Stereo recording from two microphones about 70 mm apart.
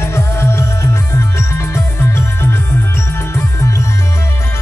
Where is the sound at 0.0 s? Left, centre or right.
Left.